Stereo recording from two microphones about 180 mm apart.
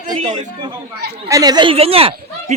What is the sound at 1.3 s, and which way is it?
Speech, 20° right (ahead or behind).